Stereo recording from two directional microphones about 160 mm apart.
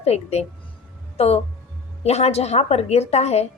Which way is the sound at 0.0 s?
40° left (ahead or behind).